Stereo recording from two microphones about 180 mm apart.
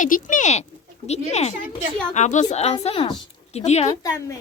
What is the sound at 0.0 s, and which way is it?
Speech, 45° left (ahead or behind).